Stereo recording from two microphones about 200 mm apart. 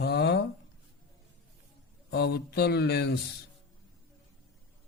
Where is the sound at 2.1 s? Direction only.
55° left (ahead or behind).